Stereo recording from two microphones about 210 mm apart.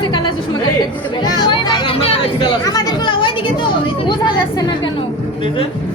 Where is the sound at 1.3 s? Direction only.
20° left (ahead or behind).